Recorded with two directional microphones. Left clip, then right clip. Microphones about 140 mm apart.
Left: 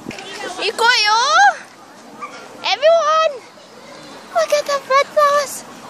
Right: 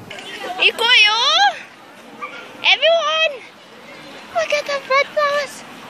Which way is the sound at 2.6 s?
25° left (ahead or behind).